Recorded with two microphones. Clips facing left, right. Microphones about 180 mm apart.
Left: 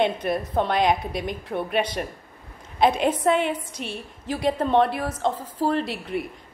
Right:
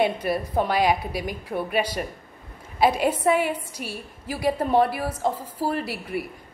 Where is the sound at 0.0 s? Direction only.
5° right (ahead or behind).